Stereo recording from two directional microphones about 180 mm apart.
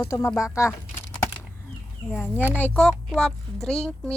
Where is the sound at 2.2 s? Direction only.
10° left (ahead or behind).